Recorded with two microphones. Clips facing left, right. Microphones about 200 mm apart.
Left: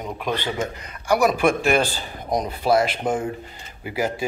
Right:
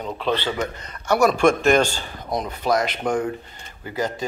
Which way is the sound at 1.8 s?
35° left (ahead or behind).